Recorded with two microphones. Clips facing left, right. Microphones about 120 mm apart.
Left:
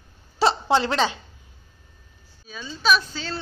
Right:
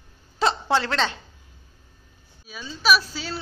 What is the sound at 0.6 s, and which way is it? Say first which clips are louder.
Speech: left 2 dB; 20° left (ahead or behind).